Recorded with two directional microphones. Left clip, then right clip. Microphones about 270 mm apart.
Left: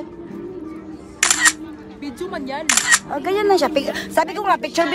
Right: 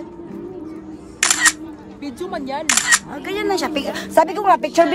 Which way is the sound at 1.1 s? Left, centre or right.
Centre.